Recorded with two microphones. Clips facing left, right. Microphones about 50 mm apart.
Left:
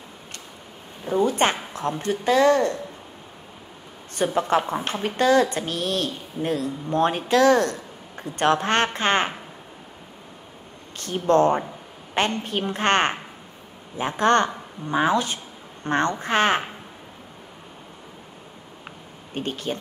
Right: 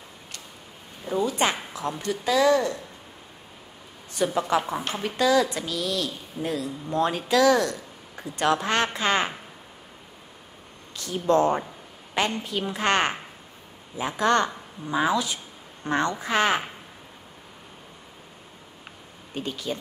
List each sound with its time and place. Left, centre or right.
1.2 s a woman's voice: left
4.1 s a woman's voice: left
11.0 s a woman's voice: left
19.3 s a woman's voice: left